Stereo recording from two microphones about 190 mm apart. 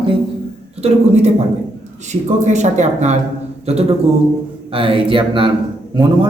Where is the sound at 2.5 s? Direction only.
40° right (ahead or behind).